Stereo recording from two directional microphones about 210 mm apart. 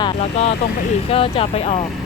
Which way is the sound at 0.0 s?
30° left (ahead or behind).